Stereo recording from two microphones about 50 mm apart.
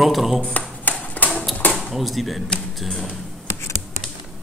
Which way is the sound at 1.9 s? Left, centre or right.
Centre.